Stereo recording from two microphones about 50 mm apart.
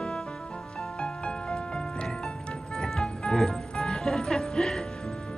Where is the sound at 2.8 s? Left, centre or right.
Centre.